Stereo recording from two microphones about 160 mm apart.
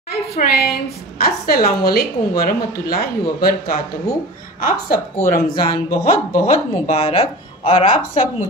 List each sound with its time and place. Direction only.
0.4 s a woman's voice: 85° left; by 5.3 s 65° left (ahead or behind)
5.5 s a woman's voice: 35° left (ahead or behind)
5.9 s a woman's voice: 55° left (ahead or behind)
6.5 s a woman's voice: 40° left (ahead or behind)